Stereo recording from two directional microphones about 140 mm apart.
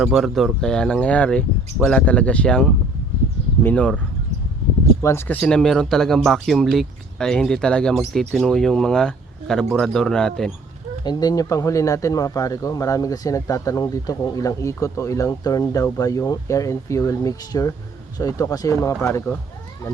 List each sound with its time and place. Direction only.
0.0 s speech: centre (ahead or behind)
5.0 s speech: 15° left (ahead or behind)
11.0 s speech: 30° left (ahead or behind)